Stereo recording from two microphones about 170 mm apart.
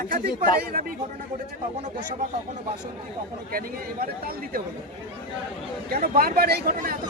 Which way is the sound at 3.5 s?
60° right (ahead or behind).